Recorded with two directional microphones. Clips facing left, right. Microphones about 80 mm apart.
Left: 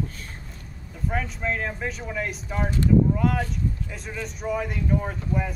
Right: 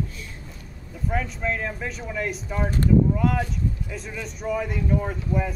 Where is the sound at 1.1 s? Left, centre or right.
Centre.